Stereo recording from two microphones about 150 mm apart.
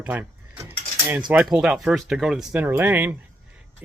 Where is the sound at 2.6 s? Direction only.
15° right (ahead or behind).